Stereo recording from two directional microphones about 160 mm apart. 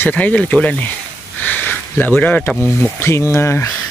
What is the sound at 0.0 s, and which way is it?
Speech, 10° left (ahead or behind).